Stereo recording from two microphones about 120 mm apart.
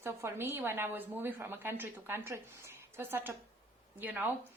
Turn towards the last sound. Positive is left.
turn(degrees=-15)  # may be behind; listen again after turning